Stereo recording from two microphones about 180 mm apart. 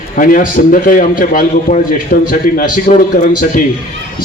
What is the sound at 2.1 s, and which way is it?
Speech, 60° left (ahead or behind).